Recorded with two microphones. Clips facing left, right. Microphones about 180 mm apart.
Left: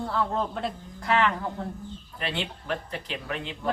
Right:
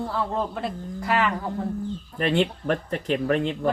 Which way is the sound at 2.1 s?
45° right (ahead or behind).